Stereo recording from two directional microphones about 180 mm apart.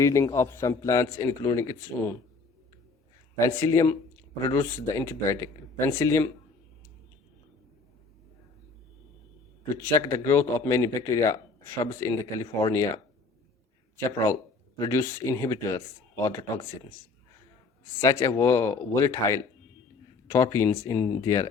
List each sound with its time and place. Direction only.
0.0 s a man's voice: 15° left (ahead or behind)
3.4 s a man's voice: 15° left (ahead or behind)
9.8 s a man's voice: 15° left (ahead or behind)
17.8 s a man's voice: 15° left (ahead or behind)